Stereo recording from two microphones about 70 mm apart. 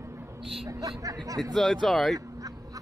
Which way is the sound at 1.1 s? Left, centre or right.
Right.